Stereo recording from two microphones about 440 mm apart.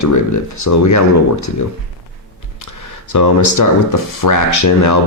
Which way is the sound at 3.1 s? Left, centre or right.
Left.